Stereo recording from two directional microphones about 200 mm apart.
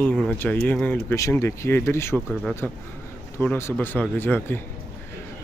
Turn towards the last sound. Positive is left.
turn(degrees=10)  # may be behind; listen again after turning